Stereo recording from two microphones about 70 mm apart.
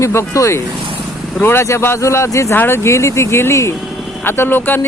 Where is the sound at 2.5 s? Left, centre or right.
Left.